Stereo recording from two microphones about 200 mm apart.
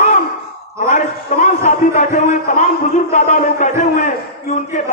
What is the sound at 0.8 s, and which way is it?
A man's voice, 45° left (ahead or behind).